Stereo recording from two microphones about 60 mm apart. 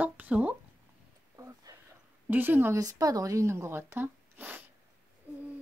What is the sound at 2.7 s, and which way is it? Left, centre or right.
A child's voice, right.